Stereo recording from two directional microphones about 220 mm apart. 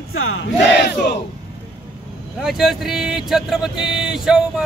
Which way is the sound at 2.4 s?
Centre (ahead or behind).